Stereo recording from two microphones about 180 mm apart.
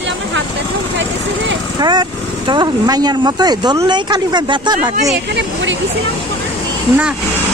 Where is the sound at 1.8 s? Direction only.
25° right (ahead or behind).